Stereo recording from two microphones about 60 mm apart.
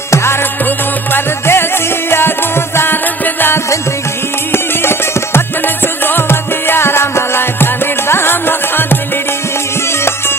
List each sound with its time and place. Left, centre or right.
0.1 s music: left
10.0 s music: left